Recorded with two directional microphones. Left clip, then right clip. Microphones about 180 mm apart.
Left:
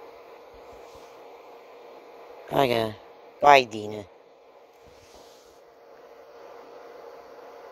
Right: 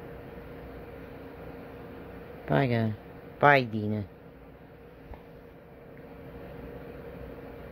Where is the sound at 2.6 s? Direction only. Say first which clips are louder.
Left 6 dB; 45° left (ahead or behind).